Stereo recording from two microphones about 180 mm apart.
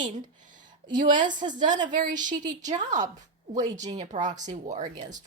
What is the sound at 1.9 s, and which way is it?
Speech, 45° right (ahead or behind).